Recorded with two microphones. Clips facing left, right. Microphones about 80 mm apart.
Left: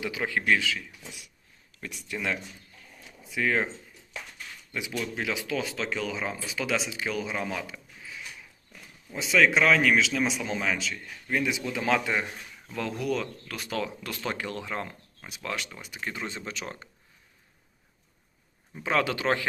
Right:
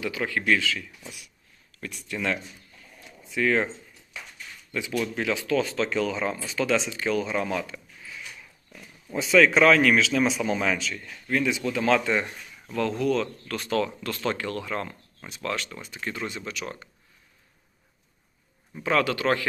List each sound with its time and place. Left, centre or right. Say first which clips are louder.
0.0 s speech: right 1 dB; centre
4.7 s speech: right 5 dB; centre
9.1 s speech: right 4 dB; centre
11.3 s speech: right 3 dB; centre
16.3 s speech: right 2 dB; left
18.7 s speech: right 3 dB; centre